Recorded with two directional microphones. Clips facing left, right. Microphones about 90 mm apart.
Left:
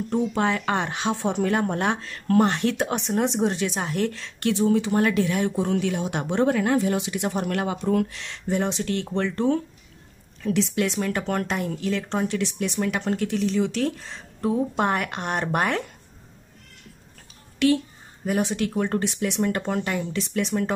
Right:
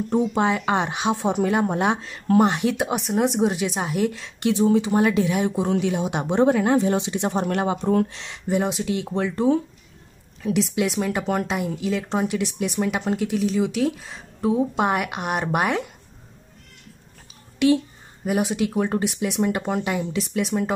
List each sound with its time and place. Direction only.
0.1 s speech: 15° right (ahead or behind)
8.5 s speech: 10° right (ahead or behind)
17.6 s a woman's voice: 20° right (ahead or behind)